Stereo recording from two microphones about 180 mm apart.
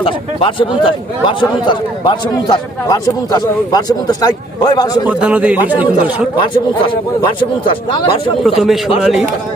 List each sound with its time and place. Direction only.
0.0 s a man's voice: 30° left (ahead or behind)
5.0 s speech: 10° right (ahead or behind)
7.9 s a man's voice: 30° left (ahead or behind)
8.4 s a man's voice: centre (ahead or behind)